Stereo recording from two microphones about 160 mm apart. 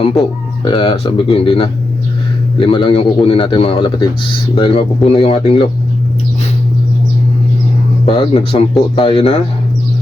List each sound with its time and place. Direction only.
0.0 s speech: 35° left (ahead or behind)
8.0 s speech: 35° left (ahead or behind)